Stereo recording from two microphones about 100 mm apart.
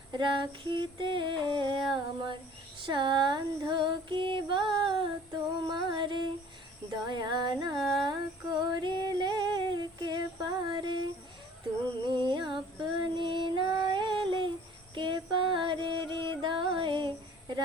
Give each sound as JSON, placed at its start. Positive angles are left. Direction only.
{"t": 0.1, "sound": "music", "side_deg": -50}
{"t": 7.8, "sound": "speech", "side_deg": 0}
{"t": 8.0, "sound": "female singing", "side_deg": -50}
{"t": 14.9, "sound": "music", "side_deg": -55}